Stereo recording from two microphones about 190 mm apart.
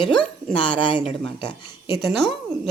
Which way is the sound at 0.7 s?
25° left (ahead or behind).